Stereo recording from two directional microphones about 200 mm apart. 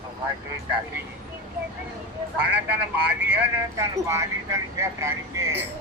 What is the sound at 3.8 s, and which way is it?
Speech, 15° right (ahead or behind).